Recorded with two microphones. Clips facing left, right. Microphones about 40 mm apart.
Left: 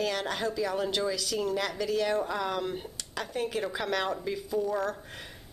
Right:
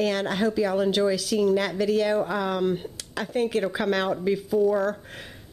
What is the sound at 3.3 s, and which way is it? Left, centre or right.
A woman's voice, right.